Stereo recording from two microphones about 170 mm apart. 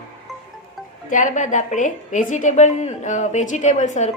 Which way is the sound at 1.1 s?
50° left (ahead or behind).